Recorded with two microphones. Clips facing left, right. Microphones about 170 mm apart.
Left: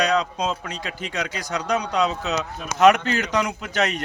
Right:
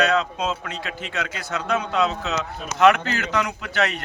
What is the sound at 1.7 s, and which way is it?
A man's voice, 15° left (ahead or behind).